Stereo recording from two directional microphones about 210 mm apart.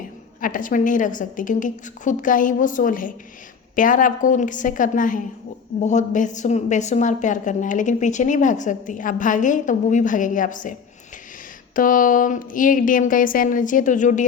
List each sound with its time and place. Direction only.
0.4 s a woman's voice: 40° left (ahead or behind)